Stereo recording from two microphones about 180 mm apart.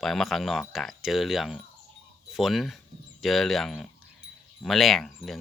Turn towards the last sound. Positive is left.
turn(degrees=0)  # may be behind; listen again after turning